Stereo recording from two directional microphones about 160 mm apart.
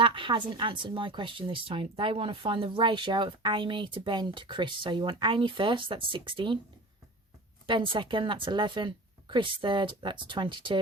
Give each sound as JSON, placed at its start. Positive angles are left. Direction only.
{"t": 0.0, "sound": "speech", "side_deg": -30}
{"t": 7.7, "sound": "speech", "side_deg": -30}